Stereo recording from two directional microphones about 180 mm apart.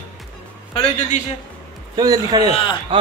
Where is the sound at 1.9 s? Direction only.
20° right (ahead or behind).